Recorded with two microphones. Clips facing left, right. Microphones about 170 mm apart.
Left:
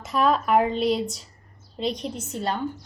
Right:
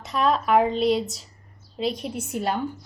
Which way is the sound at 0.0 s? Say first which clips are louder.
Left 1 dB; centre (ahead or behind).